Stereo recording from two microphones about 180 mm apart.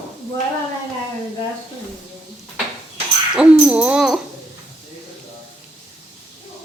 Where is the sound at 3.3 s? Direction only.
5° right (ahead or behind).